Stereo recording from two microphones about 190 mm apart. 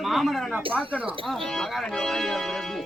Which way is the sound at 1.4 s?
Centre (ahead or behind).